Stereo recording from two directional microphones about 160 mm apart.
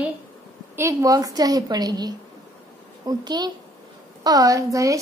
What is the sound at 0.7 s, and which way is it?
Speech, 20° right (ahead or behind).